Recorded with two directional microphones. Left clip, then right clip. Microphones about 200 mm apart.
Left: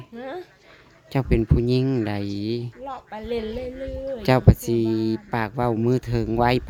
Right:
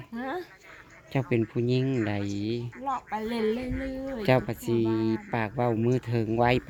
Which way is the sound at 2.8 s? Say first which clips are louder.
Right 3 dB; 10° left (ahead or behind).